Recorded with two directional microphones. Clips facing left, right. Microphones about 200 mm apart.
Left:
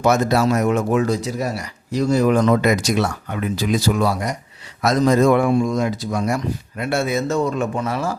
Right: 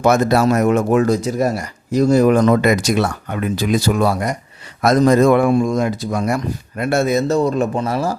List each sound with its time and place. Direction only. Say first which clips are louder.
0.0 s speech: right 3 dB; 55° right (ahead or behind); by 8.1 s 35° right (ahead or behind)